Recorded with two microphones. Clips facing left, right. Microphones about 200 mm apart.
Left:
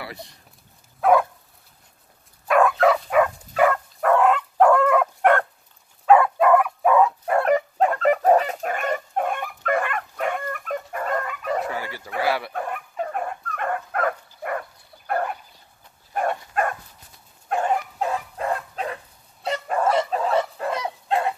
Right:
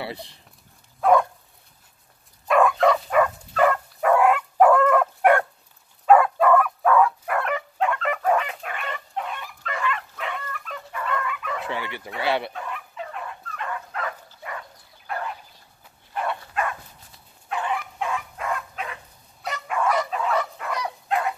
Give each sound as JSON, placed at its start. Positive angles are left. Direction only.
{"t": 2.4, "sound": "dog", "side_deg": 0}
{"t": 4.0, "sound": "dog", "side_deg": -10}
{"t": 6.4, "sound": "dog", "side_deg": 15}
{"t": 7.3, "sound": "chicken", "side_deg": 40}
{"t": 11.7, "sound": "dog", "side_deg": -25}
{"t": 12.2, "sound": "speech", "side_deg": -25}
{"t": 12.5, "sound": "dog", "side_deg": 50}
{"t": 19.4, "sound": "bow-wow", "side_deg": 35}